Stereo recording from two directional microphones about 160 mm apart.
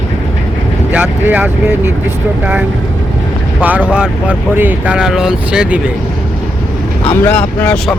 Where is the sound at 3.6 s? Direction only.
10° right (ahead or behind).